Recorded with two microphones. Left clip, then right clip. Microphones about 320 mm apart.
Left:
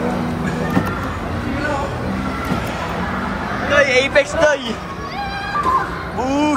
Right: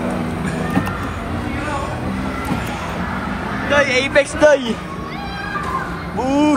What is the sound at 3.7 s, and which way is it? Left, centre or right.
A man's voice, centre.